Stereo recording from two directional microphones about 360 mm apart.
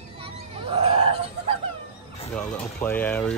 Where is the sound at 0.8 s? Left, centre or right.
Centre.